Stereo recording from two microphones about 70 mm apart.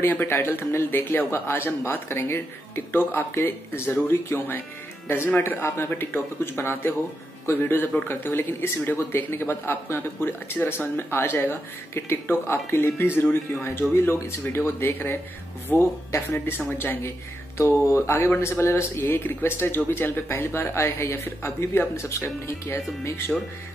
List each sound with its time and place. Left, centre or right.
0.0 s speech: left
17.6 s speech: left